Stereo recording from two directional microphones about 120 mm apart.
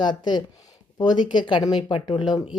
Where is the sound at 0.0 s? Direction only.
40° left (ahead or behind).